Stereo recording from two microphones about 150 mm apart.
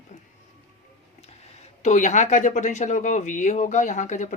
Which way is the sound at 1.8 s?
55° left (ahead or behind).